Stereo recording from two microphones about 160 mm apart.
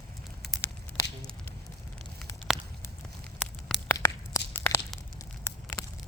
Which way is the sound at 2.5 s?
Centre (ahead or behind).